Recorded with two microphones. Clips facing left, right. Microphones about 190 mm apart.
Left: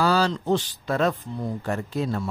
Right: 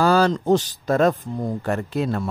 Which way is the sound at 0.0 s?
50° right (ahead or behind).